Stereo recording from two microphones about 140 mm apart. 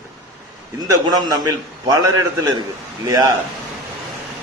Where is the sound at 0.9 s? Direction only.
25° right (ahead or behind).